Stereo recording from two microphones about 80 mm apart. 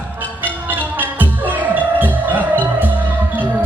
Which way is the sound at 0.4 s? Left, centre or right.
Right.